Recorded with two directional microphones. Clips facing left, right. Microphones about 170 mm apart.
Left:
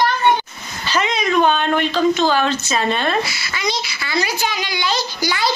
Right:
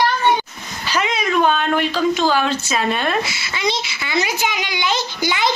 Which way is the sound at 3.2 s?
25° right (ahead or behind).